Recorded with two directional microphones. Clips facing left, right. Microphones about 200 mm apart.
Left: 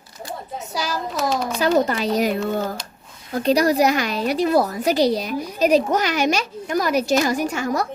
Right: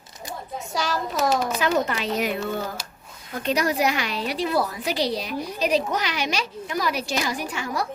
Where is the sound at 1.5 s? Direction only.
35° left (ahead or behind).